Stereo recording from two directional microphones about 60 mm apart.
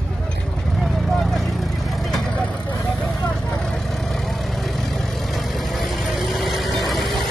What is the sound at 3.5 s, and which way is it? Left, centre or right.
Vehicle, centre.